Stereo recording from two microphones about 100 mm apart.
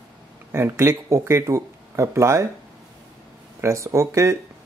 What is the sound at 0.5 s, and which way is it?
Speech, 25° right (ahead or behind).